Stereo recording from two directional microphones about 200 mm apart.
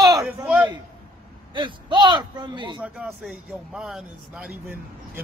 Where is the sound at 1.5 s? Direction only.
25° right (ahead or behind).